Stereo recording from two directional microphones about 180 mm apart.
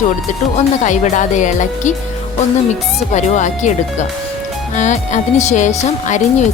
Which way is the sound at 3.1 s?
40° left (ahead or behind).